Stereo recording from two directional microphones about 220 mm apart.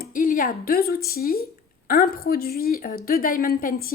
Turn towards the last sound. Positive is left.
turn(degrees=40)  # may be behind; listen again after turning